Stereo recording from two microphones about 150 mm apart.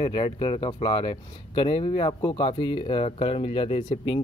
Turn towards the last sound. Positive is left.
turn(degrees=35)  # may be behind; listen again after turning